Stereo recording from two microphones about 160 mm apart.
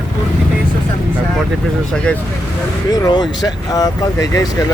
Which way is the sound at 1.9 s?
5° left (ahead or behind).